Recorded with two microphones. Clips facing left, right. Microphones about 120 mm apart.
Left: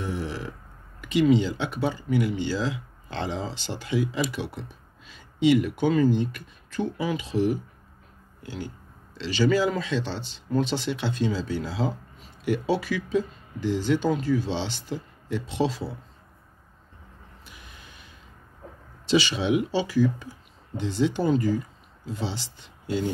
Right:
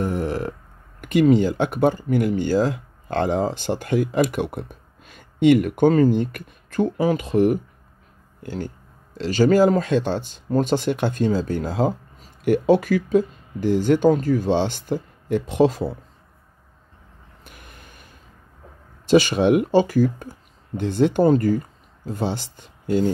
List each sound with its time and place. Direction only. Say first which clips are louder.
0.0 s burping: right 7 dB; 50° right (ahead or behind)
1.0 s speech: right 4 dB; 50° right (ahead or behind)
17.5 s a sound: right 4 dB; 55° right (ahead or behind)
19.0 s speech: right 7 dB; 50° right (ahead or behind)